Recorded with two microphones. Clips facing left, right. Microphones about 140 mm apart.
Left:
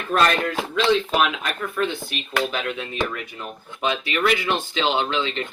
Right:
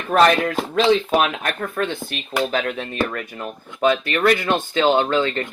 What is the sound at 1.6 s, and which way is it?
Speech, 45° right (ahead or behind).